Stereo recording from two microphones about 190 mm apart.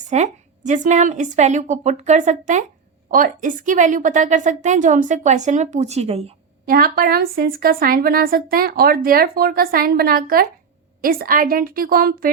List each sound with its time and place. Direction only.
0.1 s a woman's voice: 40° right (ahead or behind)
6.7 s speech: 50° right (ahead or behind)